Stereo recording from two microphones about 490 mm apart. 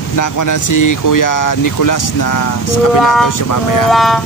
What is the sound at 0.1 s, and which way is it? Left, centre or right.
Speech, left.